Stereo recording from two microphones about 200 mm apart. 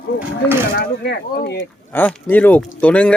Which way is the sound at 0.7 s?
55° left (ahead or behind).